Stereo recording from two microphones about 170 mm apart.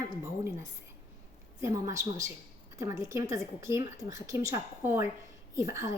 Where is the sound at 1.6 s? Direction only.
20° right (ahead or behind).